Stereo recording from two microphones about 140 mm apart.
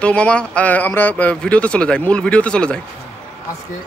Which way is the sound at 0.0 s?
10° left (ahead or behind).